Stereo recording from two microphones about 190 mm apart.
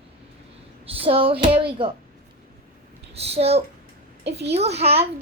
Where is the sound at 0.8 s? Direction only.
30° right (ahead or behind).